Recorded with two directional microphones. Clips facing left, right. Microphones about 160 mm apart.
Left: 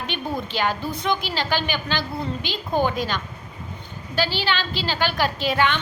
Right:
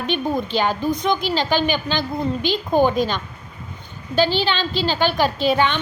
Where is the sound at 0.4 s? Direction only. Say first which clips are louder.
Right 5 dB; 15° right (ahead or behind).